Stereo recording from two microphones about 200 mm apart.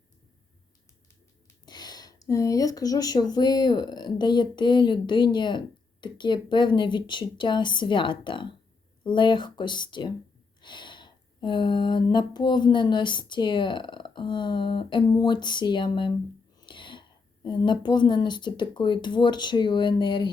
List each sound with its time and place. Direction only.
1.6 s a woman's voice: 20° left (ahead or behind)